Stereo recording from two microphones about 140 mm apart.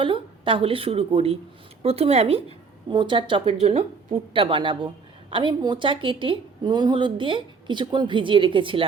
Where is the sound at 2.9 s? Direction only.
35° right (ahead or behind).